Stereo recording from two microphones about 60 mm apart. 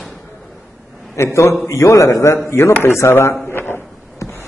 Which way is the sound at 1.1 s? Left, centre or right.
Left.